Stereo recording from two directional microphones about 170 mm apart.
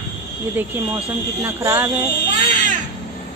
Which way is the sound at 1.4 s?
15° right (ahead or behind).